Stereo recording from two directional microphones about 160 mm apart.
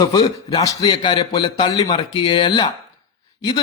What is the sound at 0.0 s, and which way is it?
A man's voice, 20° left (ahead or behind).